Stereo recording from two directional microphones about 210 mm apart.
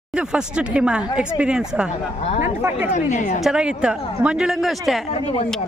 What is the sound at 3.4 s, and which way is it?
Speech, 5° right (ahead or behind).